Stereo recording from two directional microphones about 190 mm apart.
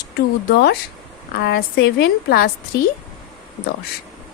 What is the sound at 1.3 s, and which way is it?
A woman's voice, 55° left (ahead or behind).